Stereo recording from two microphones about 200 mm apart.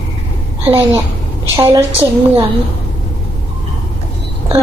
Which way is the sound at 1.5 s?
15° right (ahead or behind).